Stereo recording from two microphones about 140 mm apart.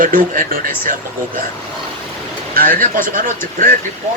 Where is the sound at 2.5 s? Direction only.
90° right.